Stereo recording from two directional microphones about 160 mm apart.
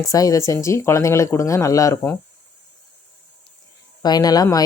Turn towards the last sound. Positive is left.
turn(degrees=25)  # may be behind; listen again after turning